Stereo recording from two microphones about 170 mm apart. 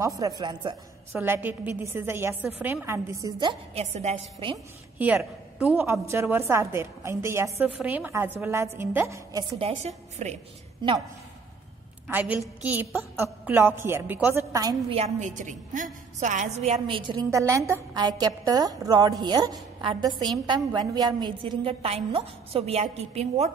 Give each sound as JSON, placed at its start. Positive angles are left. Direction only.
{"t": 0.0, "sound": "a woman's voice", "side_deg": -20}
{"t": 1.1, "sound": "a woman's voice", "side_deg": -10}
{"t": 3.7, "sound": "a woman's voice", "side_deg": -40}
{"t": 4.9, "sound": "a woman's voice", "side_deg": -10}
{"t": 9.6, "sound": "a woman's voice", "side_deg": -35}
{"t": 12.1, "sound": "a woman's voice", "side_deg": -10}
{"t": 14.9, "sound": "a woman's voice", "side_deg": -40}
{"t": 16.8, "sound": "a woman's voice", "side_deg": -30}